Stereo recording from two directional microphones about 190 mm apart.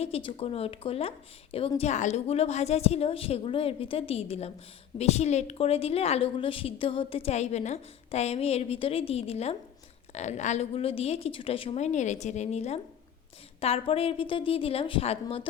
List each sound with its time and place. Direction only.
0.0 s a woman's voice: 30° left (ahead or behind)